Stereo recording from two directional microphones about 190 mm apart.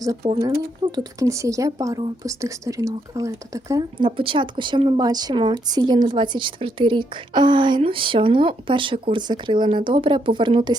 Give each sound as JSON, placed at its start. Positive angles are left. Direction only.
{"t": 0.0, "sound": "speech", "side_deg": -20}